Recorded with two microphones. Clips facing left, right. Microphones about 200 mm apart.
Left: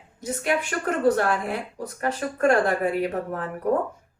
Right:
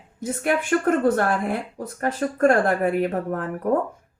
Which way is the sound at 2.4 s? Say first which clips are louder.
Right 2 dB; 50° right (ahead or behind).